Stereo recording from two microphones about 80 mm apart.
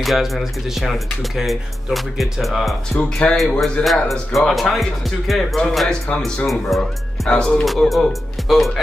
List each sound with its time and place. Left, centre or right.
0.0 s speech: centre
3.0 s speech: centre
3.8 s speech: centre
7.6 s speech: centre